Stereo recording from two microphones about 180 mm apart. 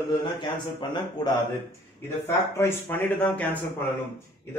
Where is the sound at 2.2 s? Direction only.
15° left (ahead or behind).